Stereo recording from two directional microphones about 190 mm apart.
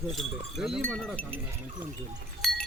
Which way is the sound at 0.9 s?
5° left (ahead or behind).